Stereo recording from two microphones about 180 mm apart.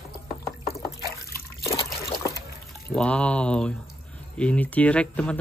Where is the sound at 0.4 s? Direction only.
15° left (ahead or behind).